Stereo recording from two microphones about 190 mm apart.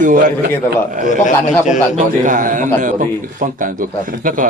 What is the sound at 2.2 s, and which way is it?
Speech, 45° right (ahead or behind).